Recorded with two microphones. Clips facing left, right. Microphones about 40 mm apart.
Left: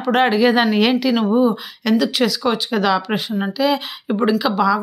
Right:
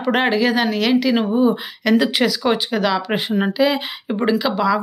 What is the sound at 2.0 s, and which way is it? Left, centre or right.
Speech, centre.